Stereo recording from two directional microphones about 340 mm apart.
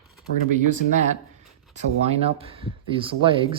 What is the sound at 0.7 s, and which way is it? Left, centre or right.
Speech, right.